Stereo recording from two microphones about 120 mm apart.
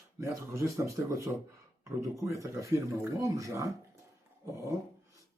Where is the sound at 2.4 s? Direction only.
25° right (ahead or behind).